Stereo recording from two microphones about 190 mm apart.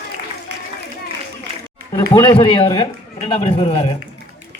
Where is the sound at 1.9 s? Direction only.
25° left (ahead or behind).